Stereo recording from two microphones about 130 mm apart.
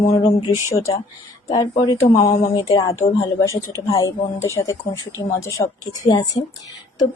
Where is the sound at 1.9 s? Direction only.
50° left (ahead or behind).